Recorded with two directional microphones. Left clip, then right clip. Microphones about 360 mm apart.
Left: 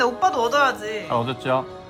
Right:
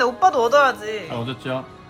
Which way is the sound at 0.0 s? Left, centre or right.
Centre.